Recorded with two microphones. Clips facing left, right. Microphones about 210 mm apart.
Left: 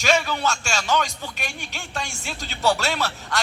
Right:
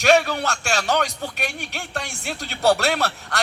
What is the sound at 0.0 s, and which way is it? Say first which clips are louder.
Speech: right 4 dB; 65° right (ahead or behind).